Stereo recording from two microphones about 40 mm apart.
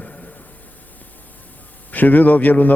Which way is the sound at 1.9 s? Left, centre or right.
Left.